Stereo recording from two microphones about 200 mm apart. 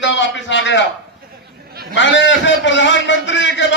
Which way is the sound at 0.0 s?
65° left (ahead or behind).